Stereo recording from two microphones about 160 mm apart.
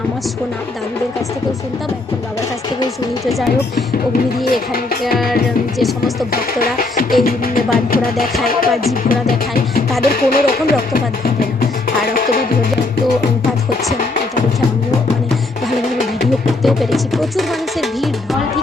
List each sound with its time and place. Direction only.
3.2 s speech: centre (ahead or behind)
4.7 s speech: 70° left (ahead or behind)
5.8 s speech: centre (ahead or behind)
6.3 s music: 65° left (ahead or behind)
10.0 s speech: 65° left (ahead or behind)
12.1 s music: 60° left (ahead or behind)
16.0 s music: centre (ahead or behind)